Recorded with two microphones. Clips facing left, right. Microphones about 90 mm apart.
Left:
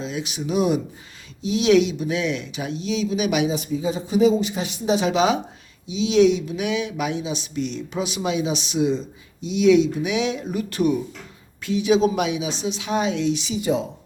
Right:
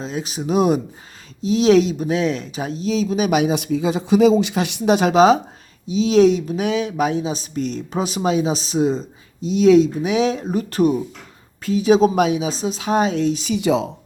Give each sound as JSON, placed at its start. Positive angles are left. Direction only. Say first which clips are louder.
{"t": 0.0, "sound": "speech", "louder": "right 2 dB", "side_deg": -40}
{"t": 3.5, "sound": "speech", "louder": "right 4 dB", "side_deg": -75}
{"t": 13.5, "sound": "speech", "louder": "right 4 dB", "side_deg": -90}